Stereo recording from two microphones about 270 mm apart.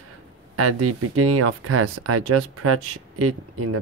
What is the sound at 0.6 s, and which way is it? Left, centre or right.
Speech, right.